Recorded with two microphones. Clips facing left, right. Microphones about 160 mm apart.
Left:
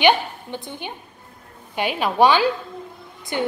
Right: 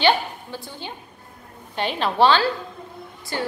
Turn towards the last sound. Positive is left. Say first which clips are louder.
# left 3 dB
turn(degrees=20)  # may be behind; listen again after turning